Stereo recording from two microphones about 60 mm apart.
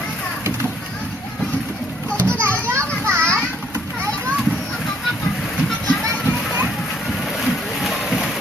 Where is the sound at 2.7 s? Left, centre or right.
Right.